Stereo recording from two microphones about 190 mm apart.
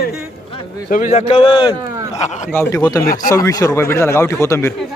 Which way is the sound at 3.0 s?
50° left (ahead or behind).